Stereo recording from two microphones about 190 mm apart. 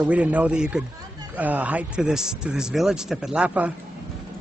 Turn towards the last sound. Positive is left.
turn(degrees=-5)  # may be behind; listen again after turning